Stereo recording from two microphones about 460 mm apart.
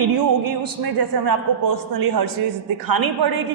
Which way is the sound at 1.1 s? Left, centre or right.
Right.